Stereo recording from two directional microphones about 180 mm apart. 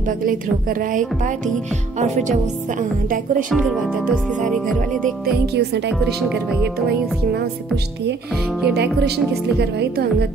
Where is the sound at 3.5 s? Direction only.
5° right (ahead or behind).